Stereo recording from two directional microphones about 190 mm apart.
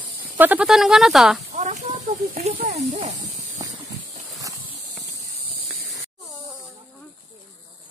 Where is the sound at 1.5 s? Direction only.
40° right (ahead or behind).